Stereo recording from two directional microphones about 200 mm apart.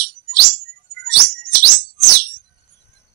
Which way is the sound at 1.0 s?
55° right (ahead or behind).